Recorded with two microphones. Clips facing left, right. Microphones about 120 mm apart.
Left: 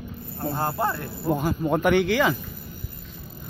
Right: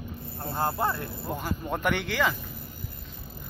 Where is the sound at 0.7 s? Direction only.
5° left (ahead or behind).